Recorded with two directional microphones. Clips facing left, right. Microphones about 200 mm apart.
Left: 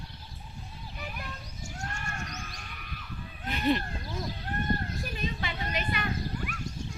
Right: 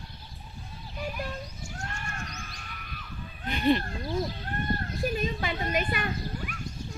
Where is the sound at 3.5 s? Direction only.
Centre (ahead or behind).